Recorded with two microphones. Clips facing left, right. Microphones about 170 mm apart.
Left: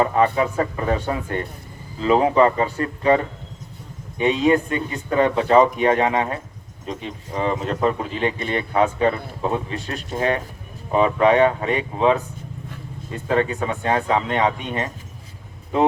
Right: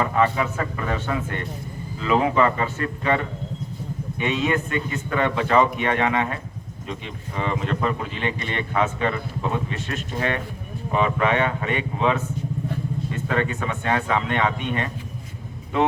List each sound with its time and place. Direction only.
0.0 s speech: 35° left (ahead or behind)
4.2 s speech: 35° left (ahead or behind)